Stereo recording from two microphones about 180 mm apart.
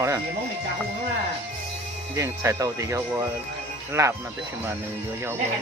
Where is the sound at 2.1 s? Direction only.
15° right (ahead or behind).